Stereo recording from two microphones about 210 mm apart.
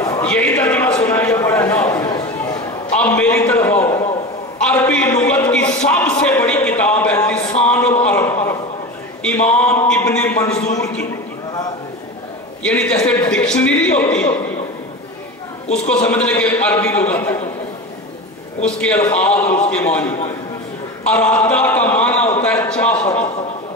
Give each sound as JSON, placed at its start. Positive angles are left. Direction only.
{"t": 0.0, "sound": "a sound", "side_deg": 15}
{"t": 3.0, "sound": "a man's voice", "side_deg": 5}
{"t": 5.9, "sound": "a sound", "side_deg": 5}
{"t": 12.6, "sound": "a man's voice", "side_deg": 5}
{"t": 16.1, "sound": "a man's voice", "side_deg": 5}
{"t": 18.6, "sound": "a man's voice", "side_deg": 5}